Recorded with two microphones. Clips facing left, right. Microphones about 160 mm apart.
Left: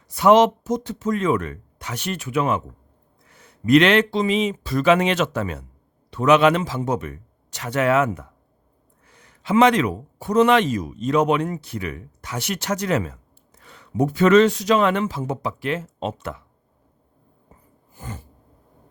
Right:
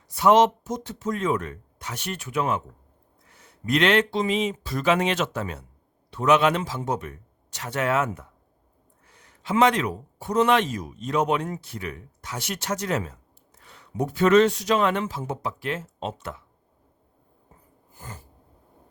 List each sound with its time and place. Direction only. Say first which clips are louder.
0.1 s a man's voice: left 3 dB; 85° left
3.3 s a man's voice: left 9 dB; 75° left (ahead or behind)